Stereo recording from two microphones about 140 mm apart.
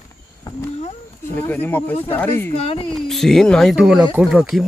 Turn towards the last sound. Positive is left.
turn(degrees=-5)  # may be behind; listen again after turning